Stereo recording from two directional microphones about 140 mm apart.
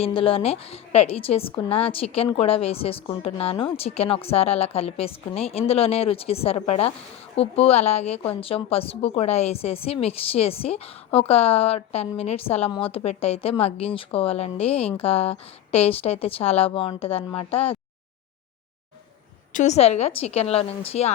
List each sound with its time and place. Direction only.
0.0 s a woman's voice: 40° left (ahead or behind)
19.5 s a woman's voice: 55° left (ahead or behind)